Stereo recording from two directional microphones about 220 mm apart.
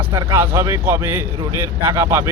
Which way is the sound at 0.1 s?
15° right (ahead or behind).